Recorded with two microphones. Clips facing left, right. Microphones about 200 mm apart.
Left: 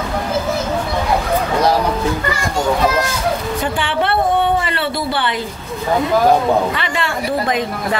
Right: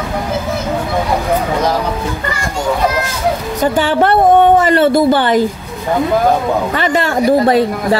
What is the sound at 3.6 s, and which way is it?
A woman's voice, 40° right (ahead or behind).